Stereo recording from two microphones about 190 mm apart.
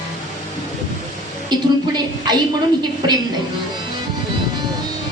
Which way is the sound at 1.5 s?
20° right (ahead or behind).